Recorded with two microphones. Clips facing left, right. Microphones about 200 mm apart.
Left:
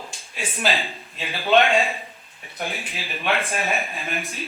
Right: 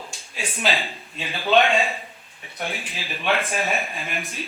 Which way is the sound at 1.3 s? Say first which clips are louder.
Left 1 dB; centre (ahead or behind).